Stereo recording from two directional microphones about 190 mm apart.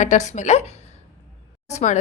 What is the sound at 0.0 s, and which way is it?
Speech, 40° left (ahead or behind).